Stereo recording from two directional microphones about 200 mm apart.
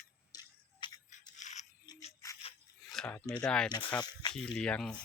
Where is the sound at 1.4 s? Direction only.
35° left (ahead or behind).